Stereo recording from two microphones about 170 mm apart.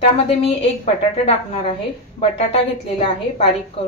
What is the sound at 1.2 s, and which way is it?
A woman's voice, 35° left (ahead or behind).